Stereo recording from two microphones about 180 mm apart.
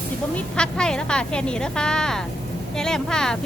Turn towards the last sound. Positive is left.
turn(degrees=5)  # may be behind; listen again after turning